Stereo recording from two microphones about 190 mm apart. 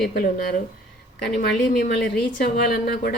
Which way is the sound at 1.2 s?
60° left (ahead or behind).